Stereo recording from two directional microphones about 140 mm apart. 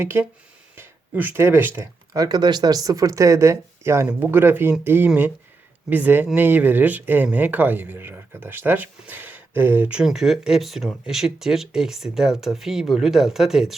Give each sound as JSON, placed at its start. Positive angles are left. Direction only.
{"t": 0.0, "sound": "a man's voice", "side_deg": -15}